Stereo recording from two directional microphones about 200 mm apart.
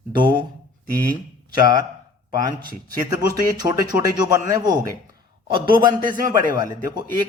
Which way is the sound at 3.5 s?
20° right (ahead or behind).